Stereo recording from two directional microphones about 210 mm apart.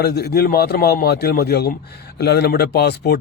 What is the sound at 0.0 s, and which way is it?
A man's voice, 50° left (ahead or behind).